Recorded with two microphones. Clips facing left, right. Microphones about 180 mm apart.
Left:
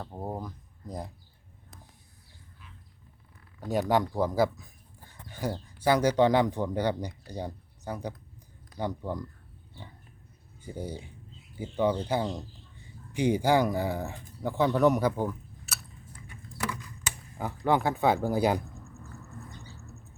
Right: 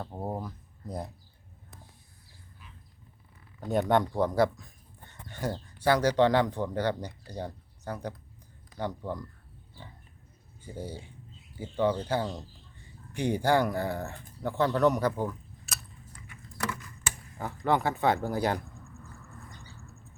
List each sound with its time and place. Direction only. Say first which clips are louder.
0.0 s speech: right 1 dB; 5° right (ahead or behind)
3.6 s speech: right 1 dB; 5° left (ahead or behind)
10.8 s speech: left 2 dB; 15° left (ahead or behind)
17.0 s a sound: left 1 dB; 10° left (ahead or behind)
17.8 s speech: left 2 dB; 10° left (ahead or behind)